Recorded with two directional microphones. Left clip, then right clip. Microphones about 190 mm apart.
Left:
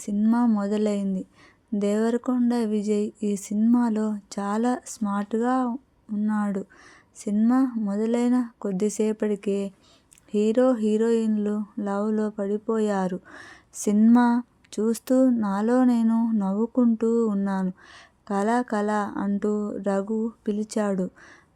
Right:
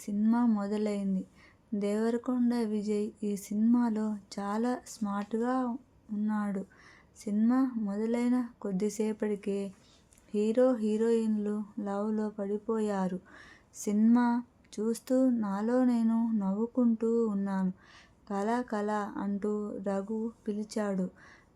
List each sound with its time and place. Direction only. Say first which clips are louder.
0.0 s speech: left 6 dB; 40° left (ahead or behind)